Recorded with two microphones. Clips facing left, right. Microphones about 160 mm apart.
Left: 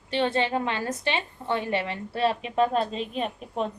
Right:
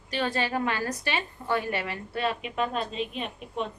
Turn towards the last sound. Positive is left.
turn(degrees=35)  # may be behind; listen again after turning